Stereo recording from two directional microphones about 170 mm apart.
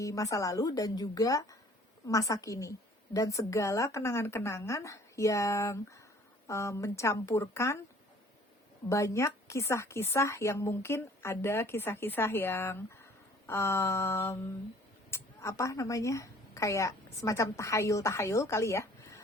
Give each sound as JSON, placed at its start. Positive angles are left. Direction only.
{"t": 0.0, "sound": "a woman's voice", "side_deg": 20}
{"t": 8.9, "sound": "a woman's voice", "side_deg": 15}